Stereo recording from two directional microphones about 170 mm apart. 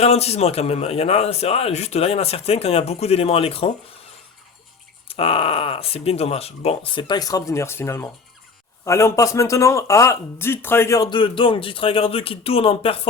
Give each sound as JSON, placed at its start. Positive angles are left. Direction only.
{"t": 0.0, "sound": "a man's voice", "side_deg": 40}
{"t": 5.0, "sound": "a man's voice", "side_deg": 35}